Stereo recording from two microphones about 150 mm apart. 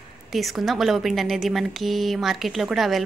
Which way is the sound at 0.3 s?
Centre (ahead or behind).